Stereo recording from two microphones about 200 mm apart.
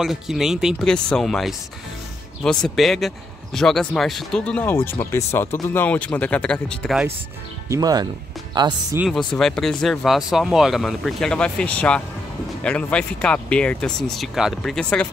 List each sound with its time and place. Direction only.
0.0 s speech: centre (ahead or behind)
7.6 s speech: 15° right (ahead or behind)
9.0 s speech: centre (ahead or behind)